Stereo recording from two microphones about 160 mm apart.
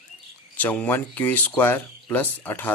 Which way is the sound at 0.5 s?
10° left (ahead or behind).